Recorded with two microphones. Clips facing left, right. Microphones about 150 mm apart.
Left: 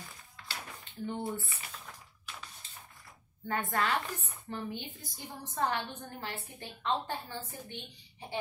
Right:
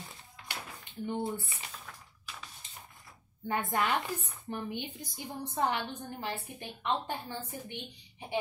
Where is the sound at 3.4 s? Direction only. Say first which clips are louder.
Right 1 dB; 15° right (ahead or behind).